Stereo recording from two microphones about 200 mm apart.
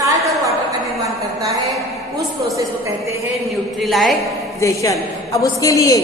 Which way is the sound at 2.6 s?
15° right (ahead or behind).